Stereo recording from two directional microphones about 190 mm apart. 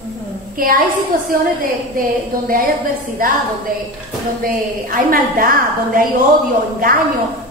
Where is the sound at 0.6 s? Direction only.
50° right (ahead or behind).